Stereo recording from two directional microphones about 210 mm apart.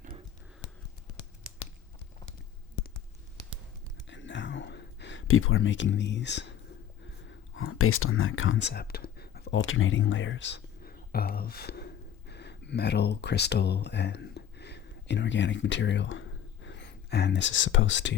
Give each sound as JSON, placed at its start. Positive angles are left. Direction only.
{"t": 4.1, "sound": "a sound", "side_deg": 60}
{"t": 7.3, "sound": "speech", "side_deg": 75}
{"t": 8.6, "sound": "speech", "side_deg": 50}